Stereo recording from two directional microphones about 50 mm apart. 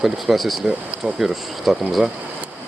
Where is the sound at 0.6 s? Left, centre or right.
Right.